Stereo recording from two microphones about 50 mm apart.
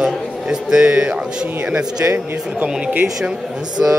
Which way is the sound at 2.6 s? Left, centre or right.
Right.